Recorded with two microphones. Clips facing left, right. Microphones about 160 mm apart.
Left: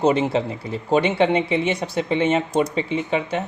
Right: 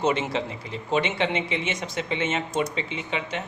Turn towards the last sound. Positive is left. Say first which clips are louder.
# left 8 dB
turn(degrees=35)  # may be behind; listen again after turning